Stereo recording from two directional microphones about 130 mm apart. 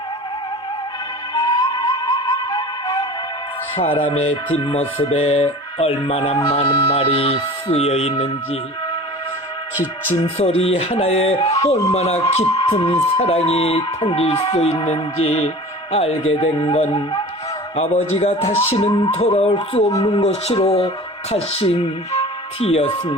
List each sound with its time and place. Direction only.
1.3 s music: 35° left (ahead or behind)
3.8 s speech: 45° left (ahead or behind)
10.2 s speech: 50° left (ahead or behind)
17.7 s speech: 55° left (ahead or behind)